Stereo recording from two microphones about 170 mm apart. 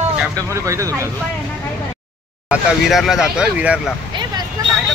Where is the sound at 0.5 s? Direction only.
20° right (ahead or behind).